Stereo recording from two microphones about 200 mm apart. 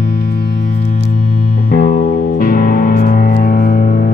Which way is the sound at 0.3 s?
50° left (ahead or behind).